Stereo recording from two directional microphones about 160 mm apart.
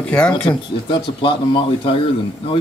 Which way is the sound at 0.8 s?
30° left (ahead or behind).